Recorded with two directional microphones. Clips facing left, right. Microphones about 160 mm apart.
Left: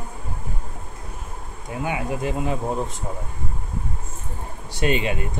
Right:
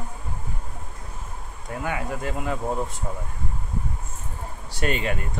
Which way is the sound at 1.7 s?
20° left (ahead or behind).